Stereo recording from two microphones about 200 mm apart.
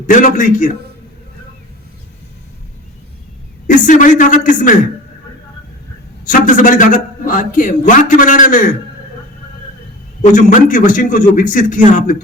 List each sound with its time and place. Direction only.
0.1 s a man's voice: 40° left (ahead or behind)
3.7 s a man's voice: 40° left (ahead or behind)
6.2 s a man's voice: 40° left (ahead or behind)
10.3 s a man's voice: 40° left (ahead or behind)